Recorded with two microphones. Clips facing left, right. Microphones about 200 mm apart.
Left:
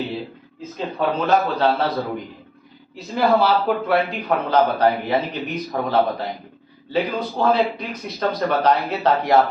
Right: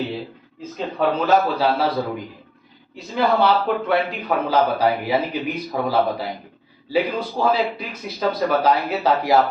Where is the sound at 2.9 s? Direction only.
Centre (ahead or behind).